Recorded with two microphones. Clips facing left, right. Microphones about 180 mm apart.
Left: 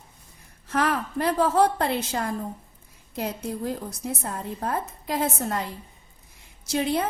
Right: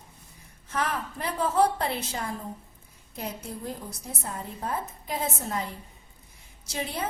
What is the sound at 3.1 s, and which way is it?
A woman's voice, 90° left.